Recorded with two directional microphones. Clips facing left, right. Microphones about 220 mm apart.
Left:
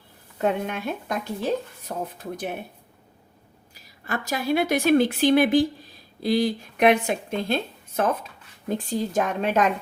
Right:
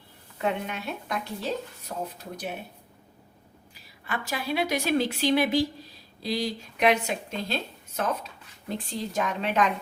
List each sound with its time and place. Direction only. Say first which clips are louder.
0.4 s speech: left 5 dB; 50° left (ahead or behind)
3.8 s speech: left 4 dB; 45° left (ahead or behind)